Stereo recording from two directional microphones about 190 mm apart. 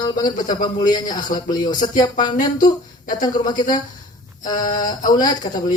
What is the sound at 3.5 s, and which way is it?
Speech, 45° left (ahead or behind).